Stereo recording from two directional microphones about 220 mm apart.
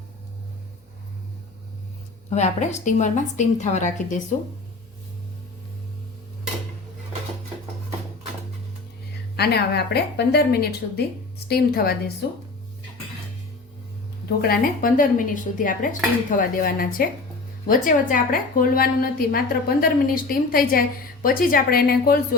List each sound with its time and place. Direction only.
2.3 s a woman's voice: 30° left (ahead or behind)
9.3 s a woman's voice: 45° left (ahead or behind)
14.4 s a woman's voice: 40° left (ahead or behind)